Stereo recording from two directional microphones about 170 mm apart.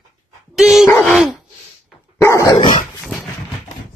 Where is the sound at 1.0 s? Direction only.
Centre (ahead or behind).